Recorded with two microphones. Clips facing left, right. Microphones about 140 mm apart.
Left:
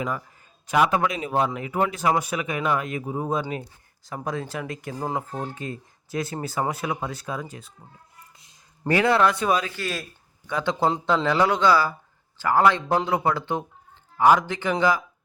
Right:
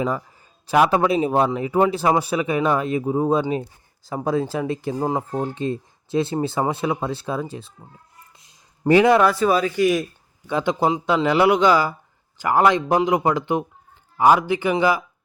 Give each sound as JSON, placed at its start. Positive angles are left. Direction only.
{"t": 0.7, "sound": "speech", "side_deg": -30}
{"t": 8.8, "sound": "speech", "side_deg": -20}
{"t": 9.2, "sound": "a man's voice", "side_deg": -5}